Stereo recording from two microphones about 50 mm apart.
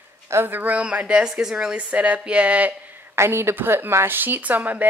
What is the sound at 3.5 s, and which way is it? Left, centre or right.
Speech, right.